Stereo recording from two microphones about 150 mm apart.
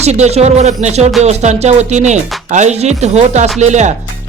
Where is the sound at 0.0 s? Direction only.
45° right (ahead or behind).